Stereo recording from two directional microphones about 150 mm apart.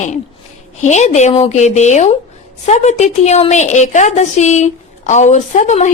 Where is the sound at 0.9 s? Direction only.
50° left (ahead or behind).